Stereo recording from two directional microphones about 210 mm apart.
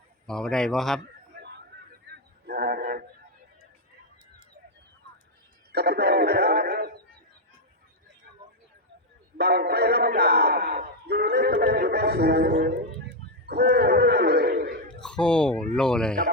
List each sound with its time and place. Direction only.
0.3 s speech: 5° left (ahead or behind)
2.1 s wild animals: 50° right (ahead or behind)
2.5 s a sound: 50° right (ahead or behind)
5.7 s speech: 50° right (ahead or behind)
9.4 s speech: 50° right (ahead or behind)
13.5 s a sound: 50° right (ahead or behind)
15.0 s speech: 5° left (ahead or behind)